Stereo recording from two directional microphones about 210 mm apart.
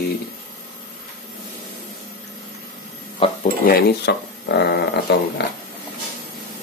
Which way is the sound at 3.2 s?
25° left (ahead or behind).